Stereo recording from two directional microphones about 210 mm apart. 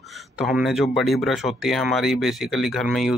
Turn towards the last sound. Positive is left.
turn(degrees=0)  # may be behind; listen again after turning